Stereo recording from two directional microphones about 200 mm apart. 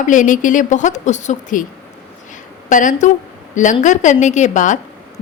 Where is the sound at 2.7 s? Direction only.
40° left (ahead or behind).